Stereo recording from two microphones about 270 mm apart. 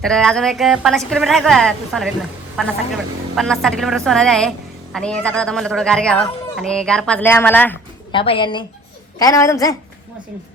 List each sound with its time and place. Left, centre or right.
0.0 s a woman's voice: centre
8.1 s a woman's voice: centre